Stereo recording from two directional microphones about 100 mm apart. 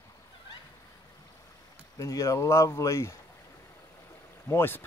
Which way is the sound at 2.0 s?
35° left (ahead or behind).